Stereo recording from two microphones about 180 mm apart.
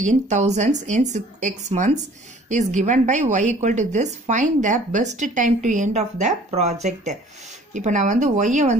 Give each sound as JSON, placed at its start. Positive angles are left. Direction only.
{"t": 0.0, "sound": "a woman's voice", "side_deg": -40}